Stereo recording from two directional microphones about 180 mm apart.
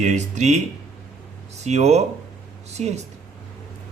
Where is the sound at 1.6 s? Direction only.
40° right (ahead or behind).